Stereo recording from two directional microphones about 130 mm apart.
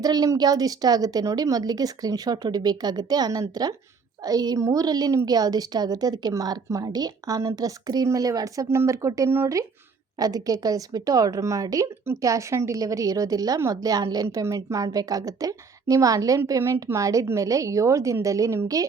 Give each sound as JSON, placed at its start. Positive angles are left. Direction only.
{"t": 0.0, "sound": "a woman's voice", "side_deg": -30}